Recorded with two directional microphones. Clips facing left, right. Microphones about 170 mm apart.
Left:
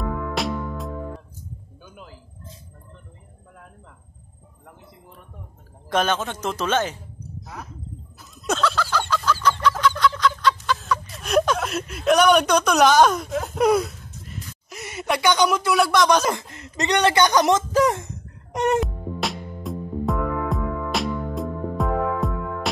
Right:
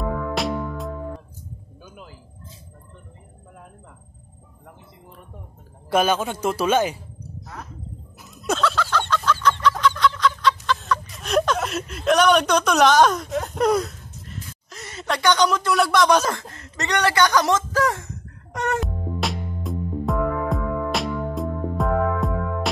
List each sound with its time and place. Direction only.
0.4 s music: centre (ahead or behind)
5.9 s speech: 10° right (ahead or behind)
8.2 s chicken: 5° right (ahead or behind)
16.5 s speech: 20° left (ahead or behind)
18.8 s music: centre (ahead or behind)